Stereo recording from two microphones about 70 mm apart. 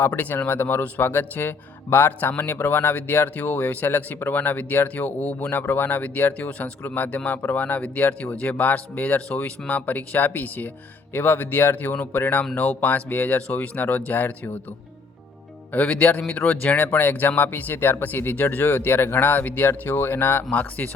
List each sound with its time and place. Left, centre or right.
0.0 s speech: left
15.7 s speech: left
20.5 s speech: left